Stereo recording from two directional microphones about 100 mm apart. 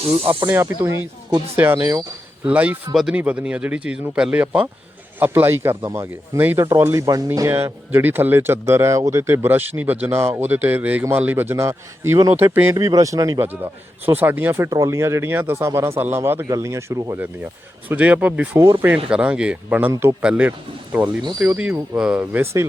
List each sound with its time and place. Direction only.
0.0 s speech: 85° right
0.5 s speech: 25° right (ahead or behind)
2.5 s speech: 15° right (ahead or behind)
2.9 s speech: centre (ahead or behind)
3.2 s speech: 15° right (ahead or behind); by 13.4 s 35° right (ahead or behind)
14.0 s speech: 20° right (ahead or behind)
17.2 s speech: 20° right (ahead or behind)
19.1 s speech: 10° right (ahead or behind)
19.9 s speech: 30° right (ahead or behind)
20.2 s speech: 15° right (ahead or behind)
22.2 s speech: 20° right (ahead or behind)